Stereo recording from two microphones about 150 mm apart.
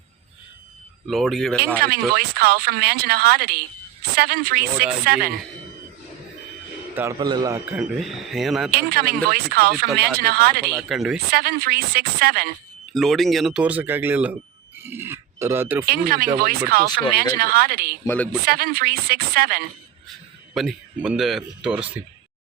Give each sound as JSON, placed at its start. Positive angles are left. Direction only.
{"t": 1.0, "sound": "speech", "side_deg": 0}
{"t": 2.0, "sound": "speech", "side_deg": -90}
{"t": 7.2, "sound": "a man's voice", "side_deg": -30}
{"t": 7.8, "sound": "speech", "side_deg": 0}
{"t": 8.7, "sound": "speech", "side_deg": -90}
{"t": 10.8, "sound": "speech", "side_deg": 0}
{"t": 11.3, "sound": "speech", "side_deg": -90}
{"t": 12.9, "sound": "speech", "side_deg": 0}
{"t": 15.9, "sound": "speech", "side_deg": -85}
{"t": 18.0, "sound": "speech", "side_deg": 10}
{"t": 18.4, "sound": "speech", "side_deg": -90}
{"t": 20.5, "sound": "speech", "side_deg": 0}